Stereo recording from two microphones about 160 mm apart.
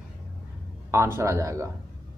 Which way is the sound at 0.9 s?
15° right (ahead or behind).